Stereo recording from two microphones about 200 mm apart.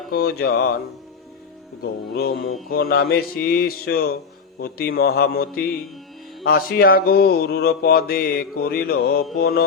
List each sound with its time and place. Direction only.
0.1 s speech: 50° left (ahead or behind)
1.8 s speech: 50° left (ahead or behind)